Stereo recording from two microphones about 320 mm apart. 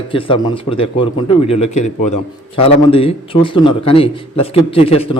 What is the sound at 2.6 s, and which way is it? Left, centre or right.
A man's voice, centre.